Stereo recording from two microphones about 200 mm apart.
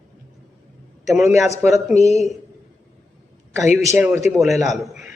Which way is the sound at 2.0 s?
35° left (ahead or behind).